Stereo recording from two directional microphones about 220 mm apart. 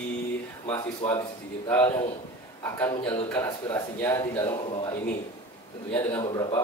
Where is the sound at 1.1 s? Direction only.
10° left (ahead or behind).